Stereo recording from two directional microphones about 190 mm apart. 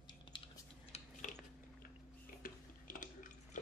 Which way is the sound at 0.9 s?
40° left (ahead or behind).